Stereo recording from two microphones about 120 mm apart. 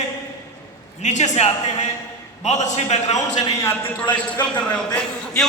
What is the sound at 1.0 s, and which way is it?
Speech, 75° left (ahead or behind).